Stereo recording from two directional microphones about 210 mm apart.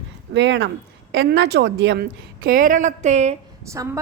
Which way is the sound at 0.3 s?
60° right (ahead or behind).